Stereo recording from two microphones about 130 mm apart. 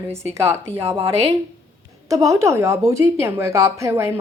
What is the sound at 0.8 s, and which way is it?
Speech, 45° right (ahead or behind).